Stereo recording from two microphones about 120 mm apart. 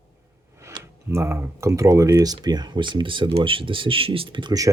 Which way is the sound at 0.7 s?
40° right (ahead or behind).